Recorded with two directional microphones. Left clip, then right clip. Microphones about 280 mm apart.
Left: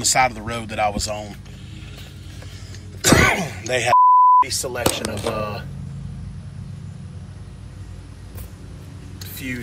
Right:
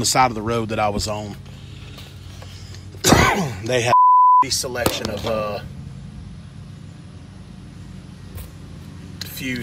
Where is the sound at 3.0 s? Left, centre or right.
Centre.